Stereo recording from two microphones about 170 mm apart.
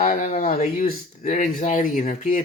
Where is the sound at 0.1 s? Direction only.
50° left (ahead or behind).